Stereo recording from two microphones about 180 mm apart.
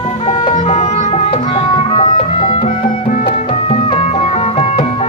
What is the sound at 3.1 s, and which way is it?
Music, 45° left (ahead or behind).